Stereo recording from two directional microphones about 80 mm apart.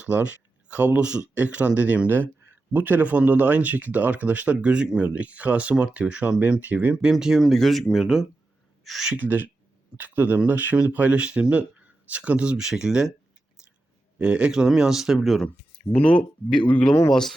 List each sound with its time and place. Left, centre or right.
0.0 s speech: centre
9.1 s speech: right
14.2 s speech: centre
15.9 s speech: centre